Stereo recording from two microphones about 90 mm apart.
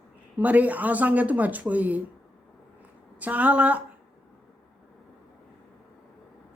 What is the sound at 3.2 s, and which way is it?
Speech, 15° right (ahead or behind).